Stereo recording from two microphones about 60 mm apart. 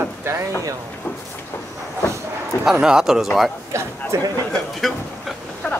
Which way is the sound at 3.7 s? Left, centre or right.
Right.